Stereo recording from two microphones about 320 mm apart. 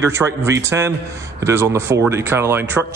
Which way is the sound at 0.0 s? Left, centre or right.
Centre.